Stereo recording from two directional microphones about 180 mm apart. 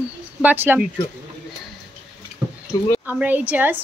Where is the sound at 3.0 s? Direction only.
10° right (ahead or behind).